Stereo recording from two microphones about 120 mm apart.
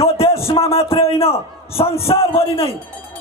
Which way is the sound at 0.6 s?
55° left (ahead or behind).